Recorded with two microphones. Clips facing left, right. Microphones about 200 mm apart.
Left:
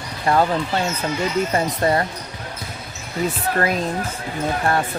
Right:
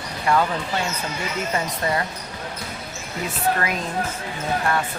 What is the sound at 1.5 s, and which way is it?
Speech, 40° left (ahead or behind).